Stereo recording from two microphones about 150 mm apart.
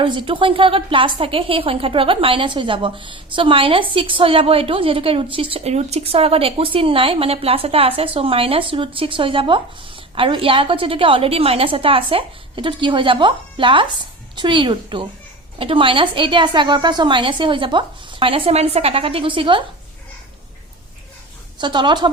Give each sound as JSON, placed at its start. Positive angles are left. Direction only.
{"t": 0.0, "sound": "a woman's voice", "side_deg": -35}
{"t": 21.6, "sound": "a woman's voice", "side_deg": -30}